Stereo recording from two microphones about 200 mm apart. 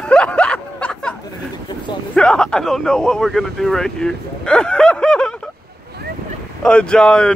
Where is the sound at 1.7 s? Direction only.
25° left (ahead or behind).